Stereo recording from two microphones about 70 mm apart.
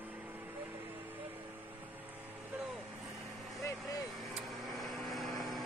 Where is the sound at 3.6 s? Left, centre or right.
Left.